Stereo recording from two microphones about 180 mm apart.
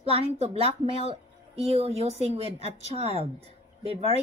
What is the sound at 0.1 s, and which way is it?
A woman's voice, 35° right (ahead or behind).